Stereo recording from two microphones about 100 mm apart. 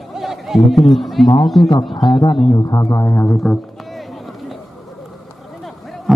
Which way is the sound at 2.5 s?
30° left (ahead or behind).